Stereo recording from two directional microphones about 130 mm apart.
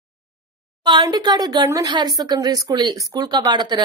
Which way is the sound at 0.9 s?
35° right (ahead or behind).